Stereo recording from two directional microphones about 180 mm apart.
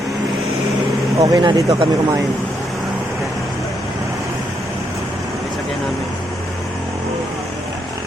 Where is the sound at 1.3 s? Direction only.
20° right (ahead or behind).